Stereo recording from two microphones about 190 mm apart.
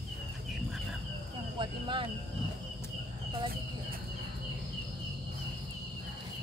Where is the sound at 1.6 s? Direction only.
25° right (ahead or behind).